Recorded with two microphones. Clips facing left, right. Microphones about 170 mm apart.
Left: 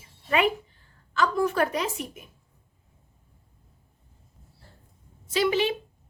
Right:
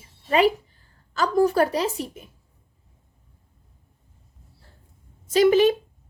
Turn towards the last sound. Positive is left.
turn(degrees=-45)  # may be behind; listen again after turning